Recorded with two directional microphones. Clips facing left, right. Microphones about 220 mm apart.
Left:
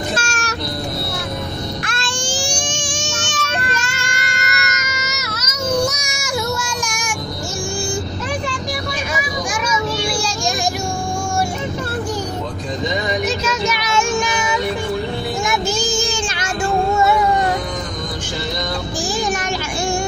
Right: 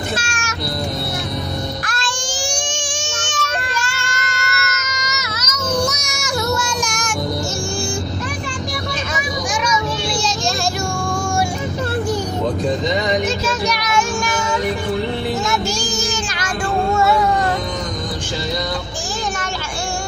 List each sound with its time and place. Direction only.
0.2 s music: 40° left (ahead or behind)
1.9 s baby cry: 25° left (ahead or behind)
3.7 s baby cry: 20° left (ahead or behind)
13.8 s child singing: 20° left (ahead or behind)
15.9 s child singing: 25° left (ahead or behind)